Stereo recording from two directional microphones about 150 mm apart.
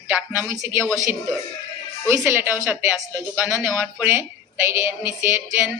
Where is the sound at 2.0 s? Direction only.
15° right (ahead or behind).